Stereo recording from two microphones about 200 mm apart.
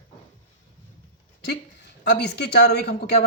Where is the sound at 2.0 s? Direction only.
55° left (ahead or behind).